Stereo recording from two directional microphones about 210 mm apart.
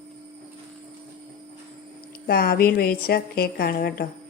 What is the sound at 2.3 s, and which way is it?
A woman's voice, 45° left (ahead or behind).